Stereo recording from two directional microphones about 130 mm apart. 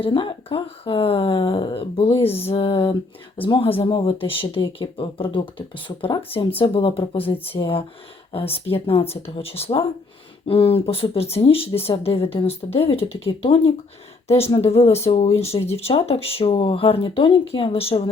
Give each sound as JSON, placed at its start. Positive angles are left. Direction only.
{"t": 0.0, "sound": "speech", "side_deg": 40}